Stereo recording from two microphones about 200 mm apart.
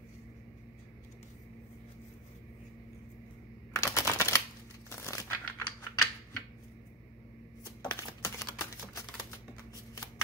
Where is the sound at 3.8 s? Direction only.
15° left (ahead or behind).